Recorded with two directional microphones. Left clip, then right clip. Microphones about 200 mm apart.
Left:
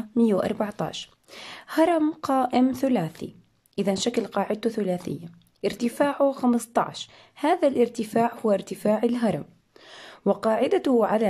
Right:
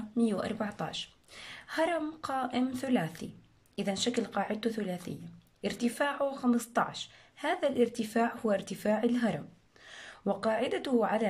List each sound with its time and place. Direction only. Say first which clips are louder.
0.2 s speech: left 9 dB; 30° left (ahead or behind)